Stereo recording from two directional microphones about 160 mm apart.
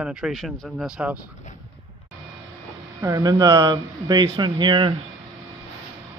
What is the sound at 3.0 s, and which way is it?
A man's voice, 20° right (ahead or behind).